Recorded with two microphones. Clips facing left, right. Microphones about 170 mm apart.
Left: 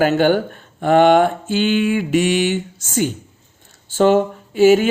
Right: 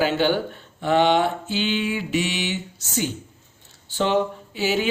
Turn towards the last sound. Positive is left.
turn(degrees=50)  # may be behind; listen again after turning